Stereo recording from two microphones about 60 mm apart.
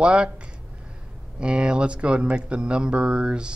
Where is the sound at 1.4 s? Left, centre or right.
Centre.